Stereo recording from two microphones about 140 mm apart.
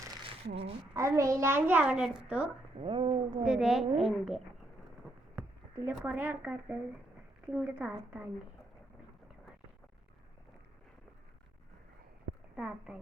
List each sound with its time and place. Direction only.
0.3 s speech: 45° right (ahead or behind)
0.9 s a child's voice: 20° right (ahead or behind)
2.7 s speech: 40° right (ahead or behind)
3.4 s a woman's voice: 5° right (ahead or behind)
5.4 s a sound: 15° right (ahead or behind)
5.9 s a child's voice: 10° right (ahead or behind)
12.5 s a child's voice: 5° right (ahead or behind)